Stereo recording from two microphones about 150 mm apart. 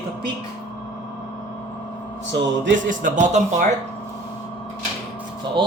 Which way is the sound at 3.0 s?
55° right (ahead or behind).